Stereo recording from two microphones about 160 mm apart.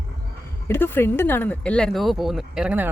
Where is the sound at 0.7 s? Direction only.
15° left (ahead or behind).